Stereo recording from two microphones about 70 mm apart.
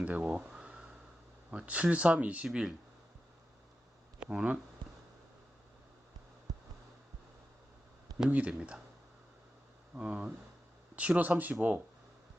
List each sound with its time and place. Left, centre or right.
0.0 s speech: right
0.5 s a sound: centre
1.5 s speech: centre
4.2 s speech: centre
8.3 s speech: centre
9.9 s speech: centre